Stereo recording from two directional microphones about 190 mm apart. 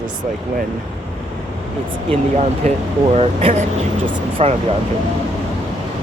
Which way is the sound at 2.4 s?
35° right (ahead or behind).